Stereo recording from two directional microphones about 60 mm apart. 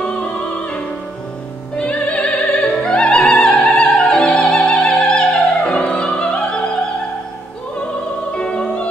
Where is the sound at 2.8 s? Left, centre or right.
Centre.